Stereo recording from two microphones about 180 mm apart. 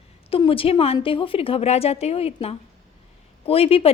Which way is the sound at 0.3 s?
30° left (ahead or behind).